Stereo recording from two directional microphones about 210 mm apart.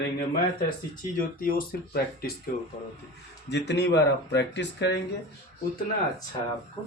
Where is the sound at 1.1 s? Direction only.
40° left (ahead or behind).